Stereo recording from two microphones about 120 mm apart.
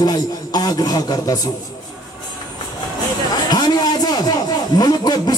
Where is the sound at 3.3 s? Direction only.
35° left (ahead or behind).